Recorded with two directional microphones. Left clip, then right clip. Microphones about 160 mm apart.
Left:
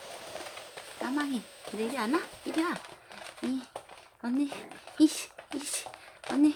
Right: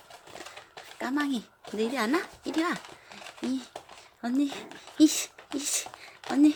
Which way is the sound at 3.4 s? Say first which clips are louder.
Right 2 dB; centre (ahead or behind).